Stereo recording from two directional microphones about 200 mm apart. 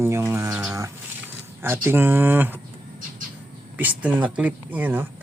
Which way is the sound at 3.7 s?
10° right (ahead or behind).